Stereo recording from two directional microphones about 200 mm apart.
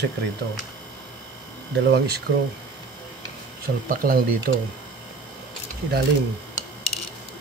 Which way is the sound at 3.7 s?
55° right (ahead or behind).